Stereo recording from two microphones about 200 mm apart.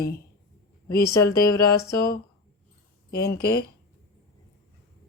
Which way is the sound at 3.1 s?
50° left (ahead or behind).